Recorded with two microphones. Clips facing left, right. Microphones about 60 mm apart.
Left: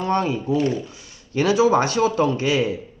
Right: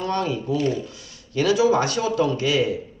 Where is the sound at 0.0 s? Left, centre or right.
Left.